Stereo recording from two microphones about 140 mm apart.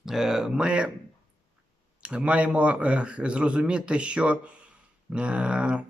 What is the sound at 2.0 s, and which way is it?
A man's voice, 10° right (ahead or behind).